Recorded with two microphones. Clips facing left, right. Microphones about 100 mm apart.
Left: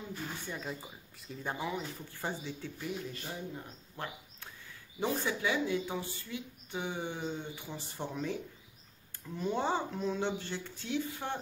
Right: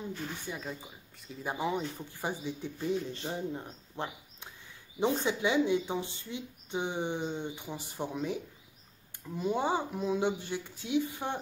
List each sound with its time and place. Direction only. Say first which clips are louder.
0.5 s speech: right 1 dB; centre (ahead or behind)
1.5 s speech: right 4 dB; 20° right (ahead or behind)
2.8 s speech: right 8 dB; 30° right (ahead or behind)
9.4 s speech: right 2 dB; 15° right (ahead or behind)